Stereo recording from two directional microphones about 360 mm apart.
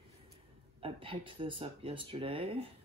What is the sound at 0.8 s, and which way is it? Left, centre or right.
Speech, centre.